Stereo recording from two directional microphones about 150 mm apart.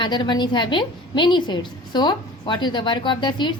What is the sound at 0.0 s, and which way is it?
A woman's voice, 30° left (ahead or behind).